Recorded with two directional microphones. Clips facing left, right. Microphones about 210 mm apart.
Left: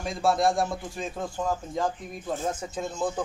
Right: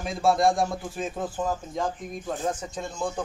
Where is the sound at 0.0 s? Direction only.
Centre (ahead or behind).